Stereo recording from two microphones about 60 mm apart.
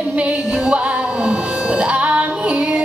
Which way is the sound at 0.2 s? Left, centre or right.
Centre.